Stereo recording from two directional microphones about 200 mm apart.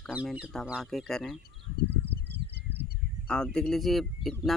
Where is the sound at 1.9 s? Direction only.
60° right (ahead or behind).